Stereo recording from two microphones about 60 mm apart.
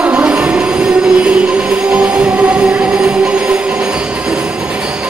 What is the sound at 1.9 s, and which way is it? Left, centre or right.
Music, centre.